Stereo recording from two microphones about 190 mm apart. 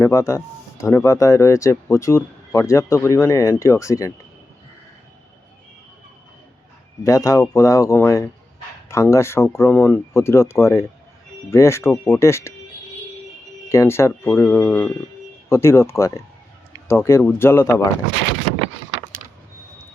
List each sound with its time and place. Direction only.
0.0 s speech: 15° left (ahead or behind)
7.0 s speech: 15° left (ahead or behind)
13.7 s speech: 15° left (ahead or behind)